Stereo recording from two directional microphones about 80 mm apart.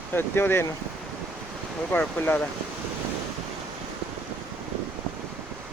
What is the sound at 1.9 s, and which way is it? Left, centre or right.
Speech, left.